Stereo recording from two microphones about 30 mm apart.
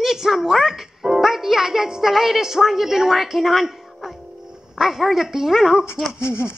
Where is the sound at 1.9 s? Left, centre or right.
Centre.